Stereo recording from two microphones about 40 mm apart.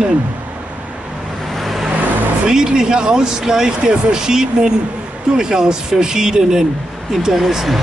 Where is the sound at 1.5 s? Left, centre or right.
Centre.